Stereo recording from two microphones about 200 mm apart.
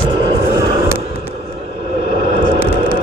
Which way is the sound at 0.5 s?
15° right (ahead or behind).